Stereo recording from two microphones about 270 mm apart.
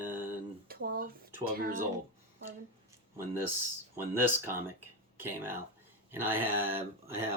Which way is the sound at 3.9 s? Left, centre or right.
Centre.